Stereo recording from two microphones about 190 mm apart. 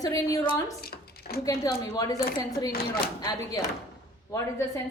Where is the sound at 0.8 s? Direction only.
55° left (ahead or behind).